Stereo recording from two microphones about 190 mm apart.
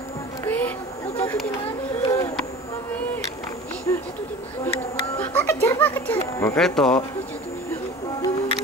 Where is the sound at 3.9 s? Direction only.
15° left (ahead or behind).